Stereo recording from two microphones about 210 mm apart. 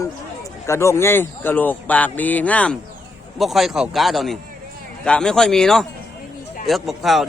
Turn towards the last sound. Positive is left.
turn(degrees=0)  # may be behind; listen again after turning